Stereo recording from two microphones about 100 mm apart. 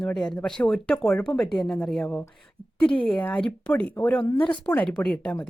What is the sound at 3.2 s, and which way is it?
Speech, 15° left (ahead or behind).